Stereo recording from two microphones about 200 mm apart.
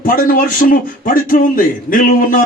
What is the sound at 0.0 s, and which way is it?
Speech, 45° left (ahead or behind).